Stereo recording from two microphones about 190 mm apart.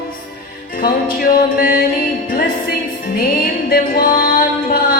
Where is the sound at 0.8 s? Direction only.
50° left (ahead or behind).